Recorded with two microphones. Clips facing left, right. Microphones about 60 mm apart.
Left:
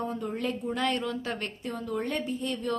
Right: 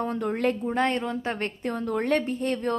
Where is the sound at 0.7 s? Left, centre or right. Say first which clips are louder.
Right 4 dB; right.